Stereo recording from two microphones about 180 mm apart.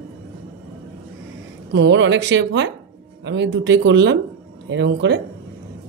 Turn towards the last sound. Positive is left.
turn(degrees=-80)